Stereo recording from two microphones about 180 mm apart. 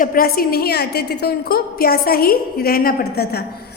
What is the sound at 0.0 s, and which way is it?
A woman's voice, 55° left (ahead or behind).